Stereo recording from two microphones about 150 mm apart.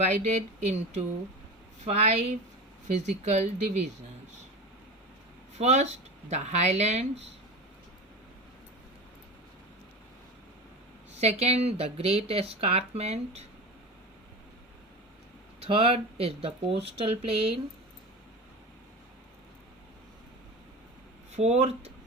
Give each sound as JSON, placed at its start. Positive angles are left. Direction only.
{"t": 0.3, "sound": "speech", "side_deg": -45}
{"t": 5.5, "sound": "speech", "side_deg": -50}
{"t": 11.2, "sound": "speech", "side_deg": -45}
{"t": 15.6, "sound": "speech", "side_deg": -40}
{"t": 21.3, "sound": "speech", "side_deg": -45}